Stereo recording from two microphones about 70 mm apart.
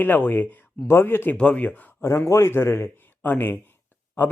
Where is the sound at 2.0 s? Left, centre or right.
Left.